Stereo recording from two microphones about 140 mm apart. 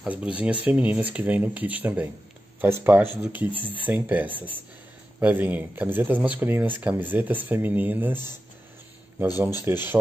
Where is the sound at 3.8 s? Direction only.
10° right (ahead or behind).